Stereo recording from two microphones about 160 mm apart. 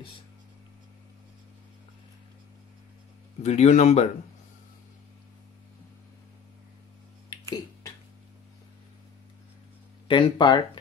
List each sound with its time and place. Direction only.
3.4 s speech: 45° left (ahead or behind)
7.2 s finger snapping: 20° left (ahead or behind)
10.0 s speech: 30° left (ahead or behind)